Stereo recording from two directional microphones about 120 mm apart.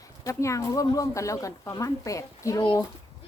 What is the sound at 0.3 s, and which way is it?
Speech, 25° left (ahead or behind).